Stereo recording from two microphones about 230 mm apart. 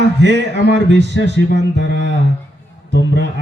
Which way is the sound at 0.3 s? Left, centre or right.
Right.